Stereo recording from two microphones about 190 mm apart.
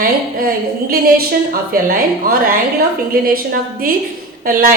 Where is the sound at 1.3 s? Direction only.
50° right (ahead or behind).